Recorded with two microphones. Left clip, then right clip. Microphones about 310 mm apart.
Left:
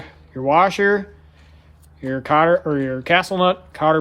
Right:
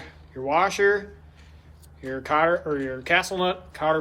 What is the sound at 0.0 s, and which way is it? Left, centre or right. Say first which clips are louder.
Speech: left 8 dB; left.